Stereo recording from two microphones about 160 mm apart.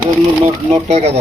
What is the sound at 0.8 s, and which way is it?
Speech, 40° right (ahead or behind).